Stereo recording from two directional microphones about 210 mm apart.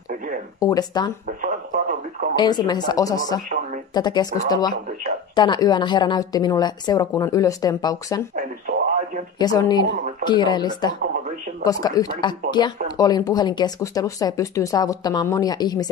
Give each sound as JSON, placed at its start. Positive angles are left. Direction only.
{"t": 0.6, "sound": "speech", "side_deg": 15}
{"t": 1.4, "sound": "radio", "side_deg": -40}
{"t": 2.3, "sound": "speech", "side_deg": 20}
{"t": 8.4, "sound": "radio", "side_deg": -35}
{"t": 9.4, "sound": "speech", "side_deg": 20}